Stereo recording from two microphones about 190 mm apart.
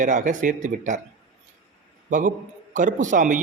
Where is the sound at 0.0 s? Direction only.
40° right (ahead or behind).